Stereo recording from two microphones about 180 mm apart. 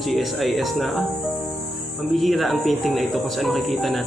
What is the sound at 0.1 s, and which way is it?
Speech, centre (ahead or behind).